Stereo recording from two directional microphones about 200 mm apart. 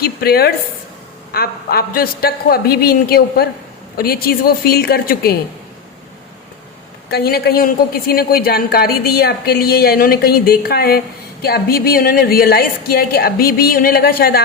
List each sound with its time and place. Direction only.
0.0 s a woman's voice: 50° left (ahead or behind)
7.1 s a woman's voice: 50° left (ahead or behind)